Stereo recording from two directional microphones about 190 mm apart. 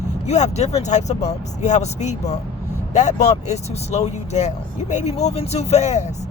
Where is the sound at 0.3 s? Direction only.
35° left (ahead or behind).